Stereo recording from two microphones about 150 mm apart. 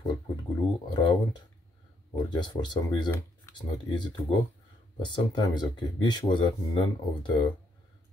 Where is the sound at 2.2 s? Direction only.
30° left (ahead or behind).